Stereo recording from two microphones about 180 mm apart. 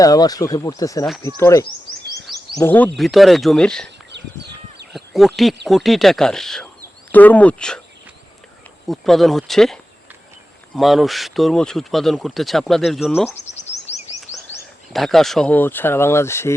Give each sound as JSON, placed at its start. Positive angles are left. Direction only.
{"t": 0.0, "sound": "speech", "side_deg": 20}
{"t": 3.0, "sound": "speech", "side_deg": 0}
{"t": 3.8, "sound": "a sound", "side_deg": -70}
{"t": 4.9, "sound": "a sound", "side_deg": 0}
{"t": 5.6, "sound": "speech", "side_deg": 0}
{"t": 8.9, "sound": "speech", "side_deg": 0}
{"t": 10.8, "sound": "speech", "side_deg": 0}
{"t": 13.3, "sound": "a sound", "side_deg": 40}
{"t": 14.9, "sound": "speech", "side_deg": 0}